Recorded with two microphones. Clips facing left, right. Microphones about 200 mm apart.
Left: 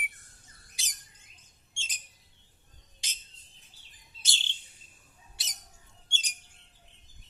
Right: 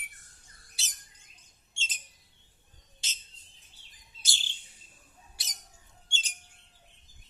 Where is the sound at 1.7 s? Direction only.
15° left (ahead or behind).